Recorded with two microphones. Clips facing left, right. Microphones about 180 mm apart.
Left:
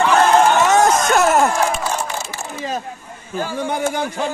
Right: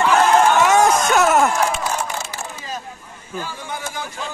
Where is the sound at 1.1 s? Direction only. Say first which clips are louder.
Left 1 dB; 5° left (ahead or behind).